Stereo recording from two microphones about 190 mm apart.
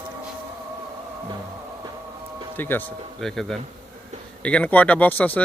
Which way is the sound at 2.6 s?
10° left (ahead or behind).